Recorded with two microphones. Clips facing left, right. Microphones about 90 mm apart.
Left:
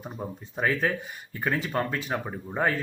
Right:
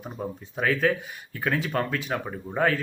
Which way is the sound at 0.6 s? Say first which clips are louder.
Right 2 dB; 15° left (ahead or behind).